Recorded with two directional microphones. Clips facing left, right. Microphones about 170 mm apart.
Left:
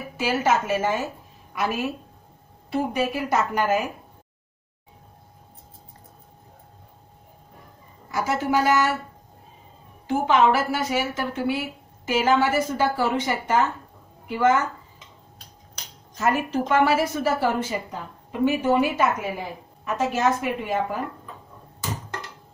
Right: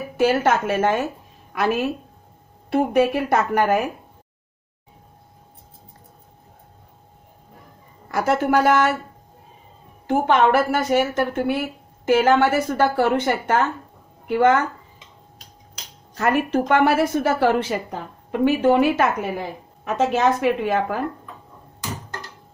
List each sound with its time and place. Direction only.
0.2 s a woman's voice: 55° right (ahead or behind)
8.1 s a woman's voice: 60° right (ahead or behind)
10.0 s a woman's voice: 55° right (ahead or behind)
16.2 s a woman's voice: 60° right (ahead or behind)